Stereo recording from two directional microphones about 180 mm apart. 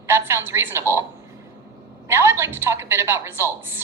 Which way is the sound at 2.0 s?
15° right (ahead or behind).